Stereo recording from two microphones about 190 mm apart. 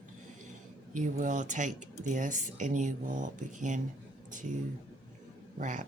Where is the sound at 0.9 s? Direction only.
40° right (ahead or behind).